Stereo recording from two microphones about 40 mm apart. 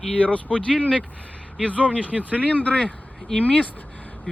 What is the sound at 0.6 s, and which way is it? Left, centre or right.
Speech, centre.